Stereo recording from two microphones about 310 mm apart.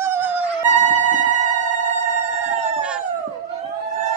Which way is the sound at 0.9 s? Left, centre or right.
Right.